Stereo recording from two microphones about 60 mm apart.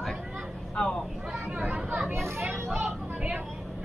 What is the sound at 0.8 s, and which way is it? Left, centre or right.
Speech, centre.